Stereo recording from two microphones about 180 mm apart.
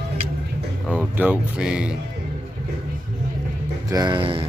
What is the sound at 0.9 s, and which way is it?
Speech, 10° right (ahead or behind).